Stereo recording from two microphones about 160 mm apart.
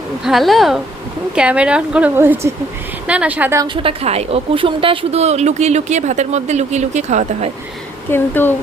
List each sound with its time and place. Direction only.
0.3 s a woman's voice: centre (ahead or behind)
3.8 s a woman's voice: 40° right (ahead or behind)
8.1 s speech: 15° left (ahead or behind)